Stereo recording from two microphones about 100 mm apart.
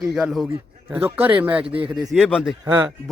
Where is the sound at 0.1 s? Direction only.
5° right (ahead or behind).